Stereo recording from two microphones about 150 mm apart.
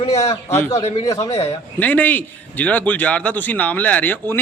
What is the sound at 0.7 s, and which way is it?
Speech, 45° left (ahead or behind).